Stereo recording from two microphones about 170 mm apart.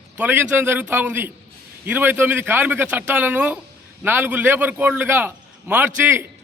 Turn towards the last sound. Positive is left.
turn(degrees=-15)  # may be behind; listen again after turning